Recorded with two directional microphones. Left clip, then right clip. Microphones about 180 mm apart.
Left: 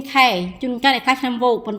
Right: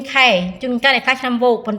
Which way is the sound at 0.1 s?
50° left (ahead or behind).